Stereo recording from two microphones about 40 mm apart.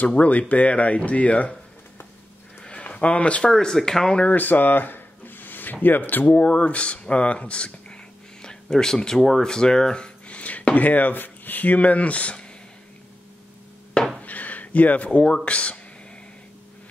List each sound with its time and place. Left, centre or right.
0.2 s speech: left
2.6 s a sound: left
3.4 s speech: centre
4.3 s speech: left
6.3 s speech: left
14.2 s a sound: left
15.0 s speech: left